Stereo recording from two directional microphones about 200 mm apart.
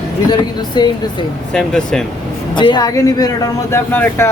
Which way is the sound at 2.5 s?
20° left (ahead or behind).